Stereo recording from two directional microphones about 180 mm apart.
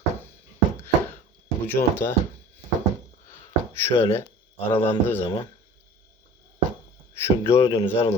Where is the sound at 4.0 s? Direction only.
15° left (ahead or behind).